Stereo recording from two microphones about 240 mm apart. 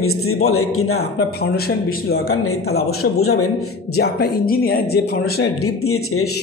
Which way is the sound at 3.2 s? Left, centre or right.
Left.